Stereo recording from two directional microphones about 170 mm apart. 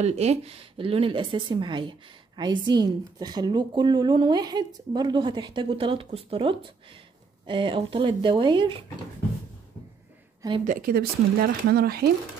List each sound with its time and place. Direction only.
0.0 s a woman's voice: 40° right (ahead or behind)
10.6 s speech: 55° right (ahead or behind)